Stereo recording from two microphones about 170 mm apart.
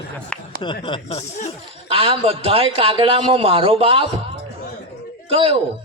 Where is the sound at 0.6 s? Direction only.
30° left (ahead or behind).